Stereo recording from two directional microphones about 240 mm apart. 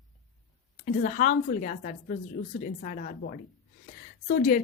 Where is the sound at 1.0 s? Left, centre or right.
Left.